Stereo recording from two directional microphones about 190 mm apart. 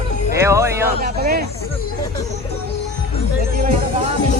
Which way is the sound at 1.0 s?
55° right (ahead or behind).